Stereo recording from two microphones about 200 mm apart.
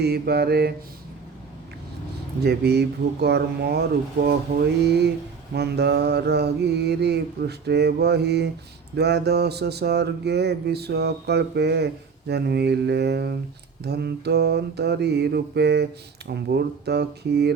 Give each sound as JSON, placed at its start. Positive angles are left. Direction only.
{"t": 0.0, "sound": "mantra", "side_deg": -55}
{"t": 2.4, "sound": "mantra", "side_deg": -55}